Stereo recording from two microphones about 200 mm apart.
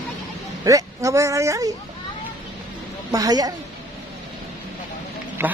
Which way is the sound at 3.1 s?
20° right (ahead or behind).